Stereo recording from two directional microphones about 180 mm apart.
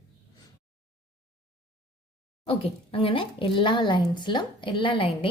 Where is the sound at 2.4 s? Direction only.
30° left (ahead or behind).